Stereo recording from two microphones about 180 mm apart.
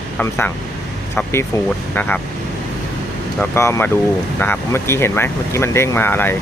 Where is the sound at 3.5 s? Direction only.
15° left (ahead or behind).